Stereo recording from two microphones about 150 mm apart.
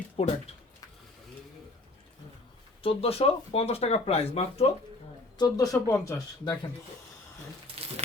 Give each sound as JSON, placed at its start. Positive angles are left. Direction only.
{"t": 0.2, "sound": "speech", "side_deg": 45}
{"t": 2.8, "sound": "speech", "side_deg": 40}
{"t": 5.4, "sound": "speech", "side_deg": 25}
{"t": 7.7, "sound": "crumpling", "side_deg": -40}